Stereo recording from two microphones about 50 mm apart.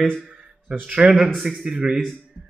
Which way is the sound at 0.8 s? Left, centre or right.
Right.